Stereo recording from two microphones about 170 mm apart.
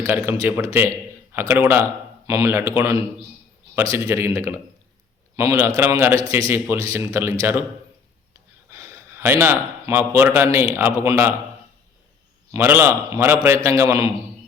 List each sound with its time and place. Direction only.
0.0 s a man's voice: 15° right (ahead or behind)
8.7 s a man's voice: 15° right (ahead or behind)
12.5 s a man's voice: 15° right (ahead or behind)